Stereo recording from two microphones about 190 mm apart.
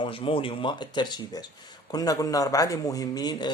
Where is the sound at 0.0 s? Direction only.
25° left (ahead or behind).